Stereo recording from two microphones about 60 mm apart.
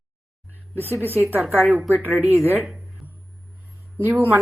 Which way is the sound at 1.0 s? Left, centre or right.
Right.